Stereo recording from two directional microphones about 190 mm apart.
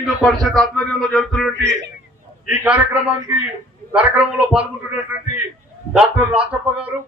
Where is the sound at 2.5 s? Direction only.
5° right (ahead or behind).